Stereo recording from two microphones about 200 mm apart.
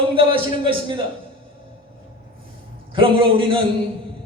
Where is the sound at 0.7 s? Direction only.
25° right (ahead or behind).